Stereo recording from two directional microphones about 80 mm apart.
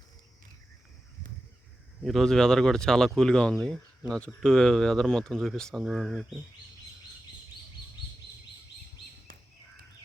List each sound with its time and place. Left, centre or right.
2.0 s speech: centre